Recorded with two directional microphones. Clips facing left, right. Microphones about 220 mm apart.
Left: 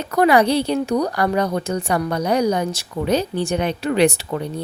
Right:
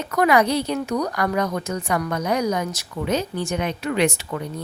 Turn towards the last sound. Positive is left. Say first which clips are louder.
# left 4 dB
turn(degrees=35)  # may be behind; listen again after turning